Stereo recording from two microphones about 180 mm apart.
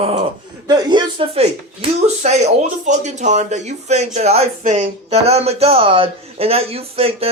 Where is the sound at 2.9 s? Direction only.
40° right (ahead or behind).